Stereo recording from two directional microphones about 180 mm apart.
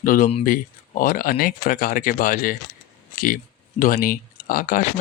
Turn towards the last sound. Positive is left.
turn(degrees=50)  # may be behind; listen again after turning